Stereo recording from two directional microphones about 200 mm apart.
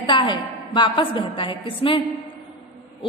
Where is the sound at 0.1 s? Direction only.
25° left (ahead or behind).